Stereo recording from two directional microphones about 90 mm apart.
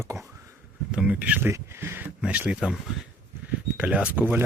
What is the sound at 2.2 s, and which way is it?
Speech, 15° right (ahead or behind).